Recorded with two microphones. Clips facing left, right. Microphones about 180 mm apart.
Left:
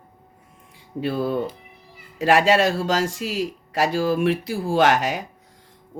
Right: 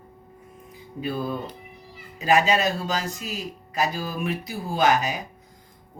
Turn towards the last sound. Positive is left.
turn(degrees=85)